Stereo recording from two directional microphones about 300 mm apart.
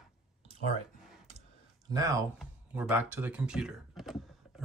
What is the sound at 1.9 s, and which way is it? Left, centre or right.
Speech, centre.